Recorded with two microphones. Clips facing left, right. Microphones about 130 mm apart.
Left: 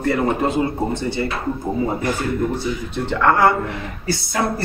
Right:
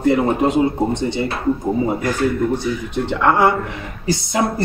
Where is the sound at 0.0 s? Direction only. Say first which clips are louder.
Right 3 dB; 15° right (ahead or behind).